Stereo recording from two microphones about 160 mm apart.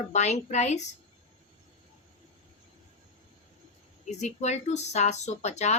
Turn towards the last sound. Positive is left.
turn(degrees=45)  # may be behind; listen again after turning